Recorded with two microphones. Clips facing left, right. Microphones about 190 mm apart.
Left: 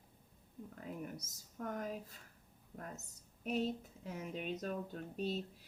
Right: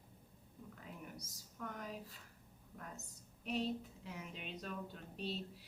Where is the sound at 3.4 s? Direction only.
45° left (ahead or behind).